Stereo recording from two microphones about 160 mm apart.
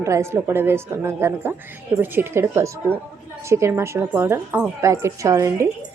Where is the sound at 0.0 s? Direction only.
20° right (ahead or behind).